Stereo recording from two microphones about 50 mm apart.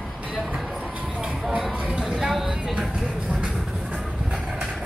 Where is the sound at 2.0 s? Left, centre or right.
Centre.